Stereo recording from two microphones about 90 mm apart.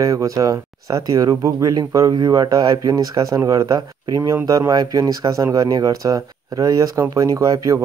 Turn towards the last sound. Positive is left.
turn(degrees=-40)  # may be behind; listen again after turning